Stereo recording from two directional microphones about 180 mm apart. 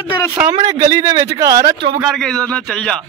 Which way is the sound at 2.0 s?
Centre (ahead or behind).